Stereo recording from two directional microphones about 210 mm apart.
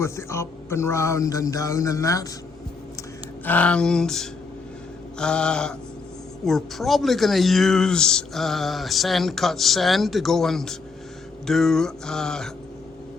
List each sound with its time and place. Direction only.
0.0 s a man's voice: 15° left (ahead or behind)
3.4 s speech: 5° left (ahead or behind)